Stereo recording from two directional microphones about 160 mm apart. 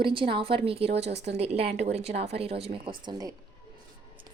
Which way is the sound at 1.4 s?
40° right (ahead or behind).